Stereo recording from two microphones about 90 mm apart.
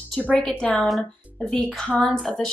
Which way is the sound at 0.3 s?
10° left (ahead or behind).